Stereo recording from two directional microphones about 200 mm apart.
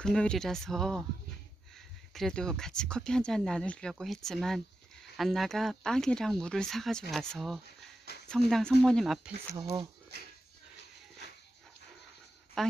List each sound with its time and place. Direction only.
0.0 s speech: 5° left (ahead or behind)
2.1 s speech: 5° left (ahead or behind)
9.6 s speech: 20° right (ahead or behind)
12.6 s speech: centre (ahead or behind)